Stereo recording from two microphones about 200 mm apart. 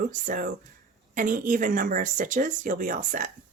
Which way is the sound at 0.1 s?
40° right (ahead or behind).